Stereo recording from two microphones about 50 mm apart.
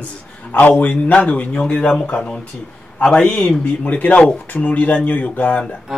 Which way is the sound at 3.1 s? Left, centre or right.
Centre.